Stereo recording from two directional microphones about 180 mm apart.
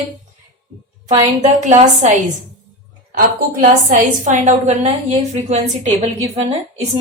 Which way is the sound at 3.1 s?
50° right (ahead or behind).